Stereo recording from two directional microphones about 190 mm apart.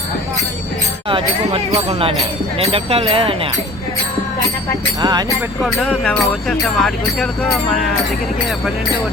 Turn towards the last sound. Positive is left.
turn(degrees=0)  # may be behind; listen again after turning